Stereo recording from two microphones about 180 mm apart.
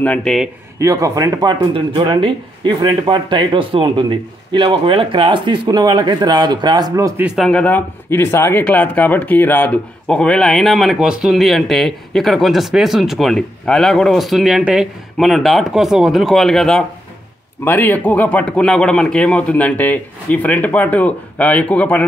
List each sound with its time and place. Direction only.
0.0 s speech: 5° left (ahead or behind)
0.7 s speech: 15° right (ahead or behind)
7.2 s a man's voice: centre (ahead or behind)